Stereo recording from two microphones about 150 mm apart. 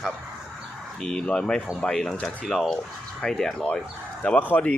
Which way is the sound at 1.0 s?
5° left (ahead or behind).